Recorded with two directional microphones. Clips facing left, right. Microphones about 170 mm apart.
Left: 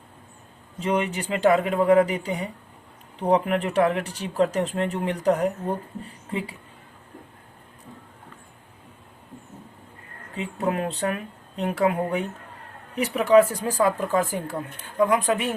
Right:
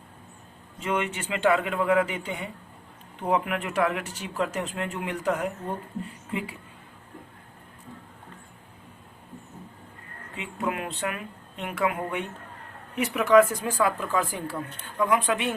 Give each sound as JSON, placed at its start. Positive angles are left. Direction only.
{"t": 0.8, "sound": "speech", "side_deg": 35}
{"t": 10.3, "sound": "speech", "side_deg": 40}